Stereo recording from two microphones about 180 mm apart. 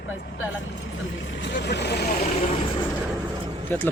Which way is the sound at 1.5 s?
70° left (ahead or behind).